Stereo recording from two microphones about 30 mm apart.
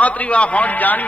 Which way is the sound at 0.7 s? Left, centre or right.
Left.